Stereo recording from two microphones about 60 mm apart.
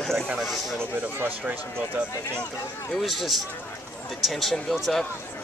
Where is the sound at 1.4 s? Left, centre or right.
Right.